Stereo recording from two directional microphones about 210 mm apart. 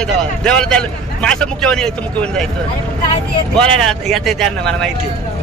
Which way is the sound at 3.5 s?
5° left (ahead or behind).